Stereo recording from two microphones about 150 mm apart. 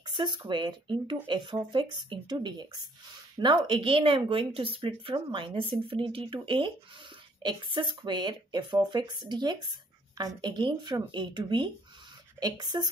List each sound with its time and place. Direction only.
0.1 s speech: 30° right (ahead or behind)